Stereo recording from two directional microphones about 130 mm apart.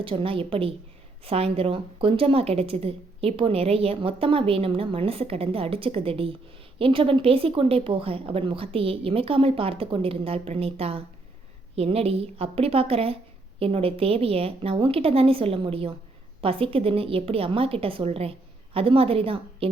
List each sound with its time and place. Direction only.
0.0 s a woman's voice: 45° right (ahead or behind)